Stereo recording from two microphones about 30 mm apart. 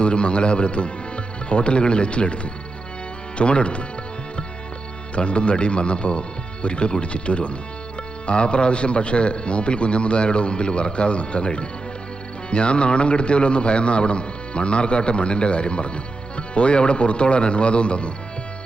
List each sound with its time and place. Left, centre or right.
0.0 s a man's voice: left
5.1 s a man's voice: left